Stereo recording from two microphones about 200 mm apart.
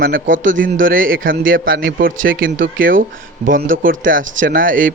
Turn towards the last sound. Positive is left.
turn(degrees=-45)  # may be behind; listen again after turning